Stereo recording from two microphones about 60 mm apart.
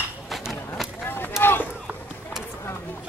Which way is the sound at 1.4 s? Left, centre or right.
Left.